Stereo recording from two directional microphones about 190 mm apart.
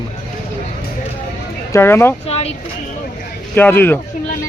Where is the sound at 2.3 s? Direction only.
35° left (ahead or behind).